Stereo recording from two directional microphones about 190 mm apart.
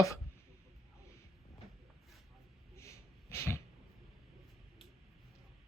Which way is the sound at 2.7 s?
15° left (ahead or behind).